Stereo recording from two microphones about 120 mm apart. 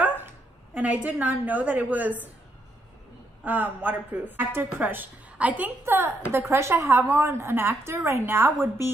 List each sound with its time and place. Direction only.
0.0 s dog: 15° right (ahead or behind)
0.7 s a woman's voice: 15° right (ahead or behind)
3.4 s a woman's voice: 15° right (ahead or behind)